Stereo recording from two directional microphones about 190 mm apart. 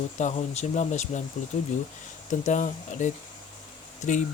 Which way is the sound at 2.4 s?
40° left (ahead or behind).